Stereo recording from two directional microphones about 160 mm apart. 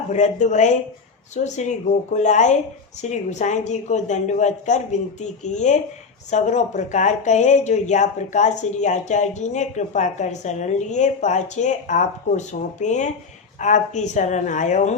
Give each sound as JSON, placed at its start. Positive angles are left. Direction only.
{"t": 0.1, "sound": "speech", "side_deg": 50}